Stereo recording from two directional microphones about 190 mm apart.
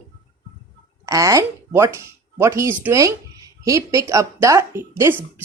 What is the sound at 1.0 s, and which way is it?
A woman's voice, 15° right (ahead or behind).